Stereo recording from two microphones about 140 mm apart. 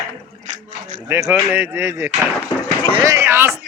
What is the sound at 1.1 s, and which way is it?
Speech, 15° right (ahead or behind).